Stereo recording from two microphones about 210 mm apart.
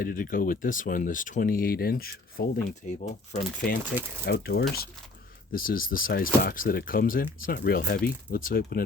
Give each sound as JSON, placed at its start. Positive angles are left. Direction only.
{"t": 0.0, "sound": "speech", "side_deg": 45}